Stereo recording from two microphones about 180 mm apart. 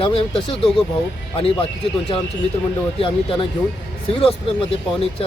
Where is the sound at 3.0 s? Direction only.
30° left (ahead or behind).